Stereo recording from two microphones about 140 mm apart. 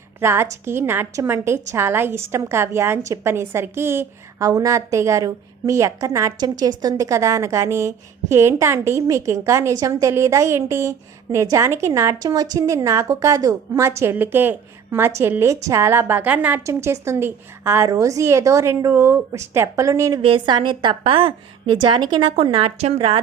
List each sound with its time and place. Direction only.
0.2 s a woman's voice: 15° right (ahead or behind)
16.6 s a woman's voice: 20° right (ahead or behind)
20.2 s a woman's voice: 35° right (ahead or behind)